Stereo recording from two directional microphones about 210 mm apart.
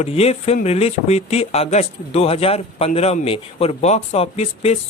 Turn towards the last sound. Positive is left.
turn(degrees=30)  # may be behind; listen again after turning